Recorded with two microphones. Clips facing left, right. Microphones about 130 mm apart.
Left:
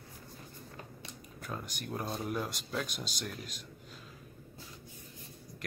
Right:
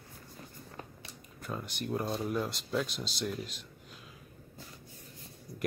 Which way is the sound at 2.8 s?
50° left (ahead or behind).